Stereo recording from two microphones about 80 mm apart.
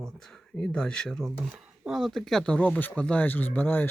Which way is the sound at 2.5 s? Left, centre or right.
Centre.